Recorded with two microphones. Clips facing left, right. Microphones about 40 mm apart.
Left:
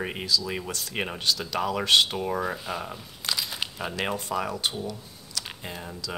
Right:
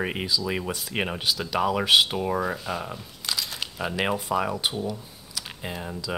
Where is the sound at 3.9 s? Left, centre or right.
Centre.